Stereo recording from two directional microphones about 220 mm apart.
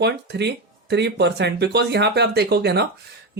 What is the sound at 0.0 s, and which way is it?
Speech, 50° right (ahead or behind).